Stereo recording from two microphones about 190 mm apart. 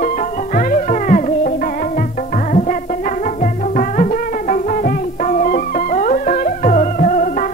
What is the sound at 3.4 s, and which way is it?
Music, 40° left (ahead or behind).